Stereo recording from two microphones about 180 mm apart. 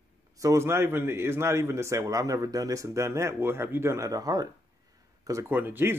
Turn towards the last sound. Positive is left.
turn(degrees=-10)  # may be behind; listen again after turning